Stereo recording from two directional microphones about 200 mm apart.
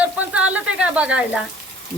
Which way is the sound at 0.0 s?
5° right (ahead or behind).